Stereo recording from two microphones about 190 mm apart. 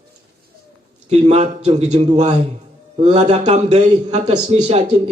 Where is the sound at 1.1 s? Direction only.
35° right (ahead or behind).